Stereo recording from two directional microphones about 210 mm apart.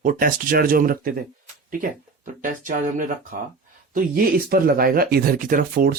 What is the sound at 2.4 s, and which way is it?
Speech, 40° right (ahead or behind).